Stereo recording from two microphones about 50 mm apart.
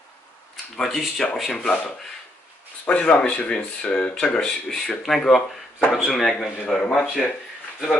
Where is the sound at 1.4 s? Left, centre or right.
Centre.